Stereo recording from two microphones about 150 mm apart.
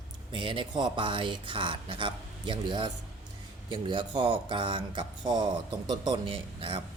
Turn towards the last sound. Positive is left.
turn(degrees=-35)  # may be behind; listen again after turning